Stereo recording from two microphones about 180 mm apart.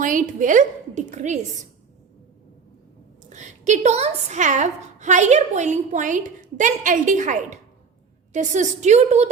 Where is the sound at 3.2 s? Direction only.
40° right (ahead or behind).